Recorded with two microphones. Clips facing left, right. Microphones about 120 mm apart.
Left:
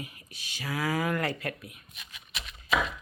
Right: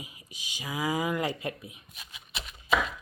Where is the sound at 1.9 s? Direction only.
30° right (ahead or behind).